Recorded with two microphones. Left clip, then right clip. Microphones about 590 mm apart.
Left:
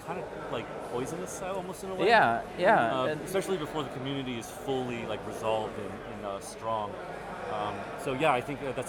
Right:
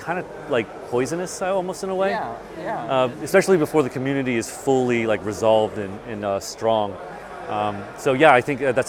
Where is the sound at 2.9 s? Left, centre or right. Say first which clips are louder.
Right 12 dB; right.